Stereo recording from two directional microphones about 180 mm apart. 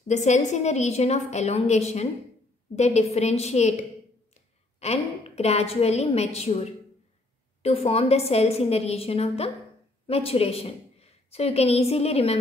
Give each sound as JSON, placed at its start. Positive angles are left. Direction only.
{"t": 0.1, "sound": "a woman's voice", "side_deg": 40}